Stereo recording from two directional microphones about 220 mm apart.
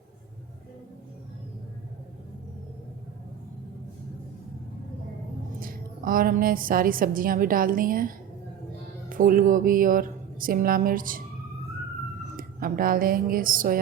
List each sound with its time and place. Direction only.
5.5 s a woman's voice: 40° right (ahead or behind)
12.4 s speech: 40° right (ahead or behind)